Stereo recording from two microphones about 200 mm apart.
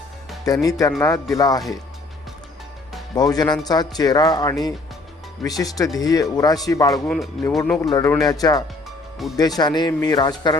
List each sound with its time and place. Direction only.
0.4 s speech: 15° left (ahead or behind)
3.2 s speech: 20° left (ahead or behind)